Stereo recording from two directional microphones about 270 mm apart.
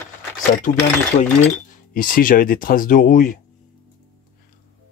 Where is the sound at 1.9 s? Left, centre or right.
Left.